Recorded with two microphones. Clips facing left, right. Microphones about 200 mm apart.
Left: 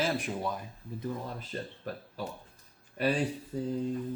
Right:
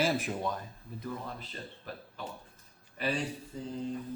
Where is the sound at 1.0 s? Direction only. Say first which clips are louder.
Left 3 dB; 40° left (ahead or behind).